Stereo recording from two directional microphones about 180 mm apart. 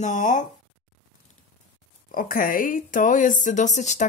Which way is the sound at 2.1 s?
50° left (ahead or behind).